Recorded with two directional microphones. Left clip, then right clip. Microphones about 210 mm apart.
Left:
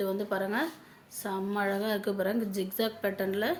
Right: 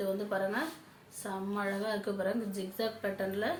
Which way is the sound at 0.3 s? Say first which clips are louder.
Left 2 dB; 45° left (ahead or behind).